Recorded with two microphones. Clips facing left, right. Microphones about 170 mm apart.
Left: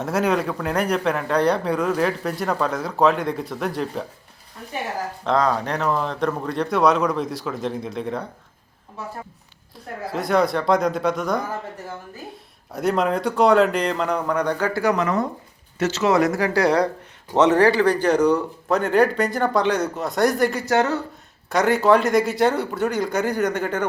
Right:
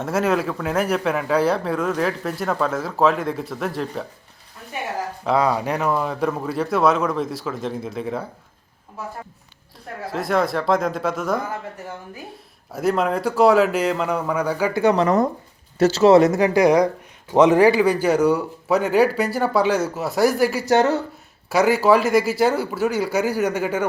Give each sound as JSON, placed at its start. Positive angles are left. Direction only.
{"t": 0.0, "sound": "a man's voice", "side_deg": 0}
{"t": 5.2, "sound": "a man's voice", "side_deg": -10}
{"t": 10.1, "sound": "a man's voice", "side_deg": 0}
{"t": 12.7, "sound": "a man's voice", "side_deg": 0}
{"t": 14.7, "sound": "a man's voice", "side_deg": -25}